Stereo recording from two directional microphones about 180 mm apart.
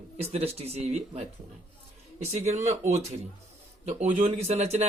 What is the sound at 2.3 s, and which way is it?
Speech, 40° right (ahead or behind).